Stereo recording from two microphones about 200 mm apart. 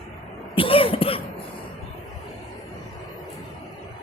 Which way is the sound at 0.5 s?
25° left (ahead or behind).